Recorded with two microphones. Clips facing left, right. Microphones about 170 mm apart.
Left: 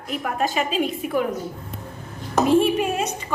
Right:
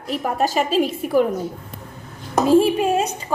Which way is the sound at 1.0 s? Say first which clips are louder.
Right 5 dB; 35° right (ahead or behind).